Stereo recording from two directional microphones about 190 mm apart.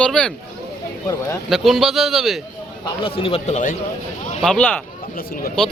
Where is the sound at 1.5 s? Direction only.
Centre (ahead or behind).